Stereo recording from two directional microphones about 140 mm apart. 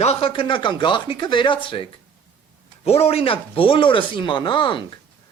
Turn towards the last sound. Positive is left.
turn(degrees=35)  # may be behind; listen again after turning